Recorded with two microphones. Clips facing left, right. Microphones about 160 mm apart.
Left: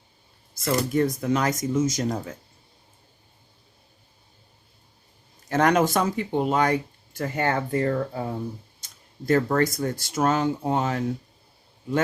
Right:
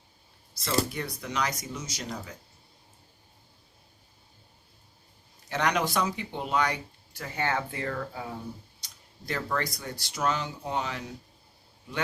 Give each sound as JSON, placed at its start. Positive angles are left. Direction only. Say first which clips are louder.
{"t": 0.6, "sound": "speech", "louder": "left 7 dB", "side_deg": 50}
{"t": 5.5, "sound": "speech", "louder": "left 8 dB", "side_deg": 50}